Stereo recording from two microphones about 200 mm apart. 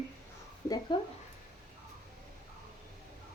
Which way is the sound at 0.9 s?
25° left (ahead or behind).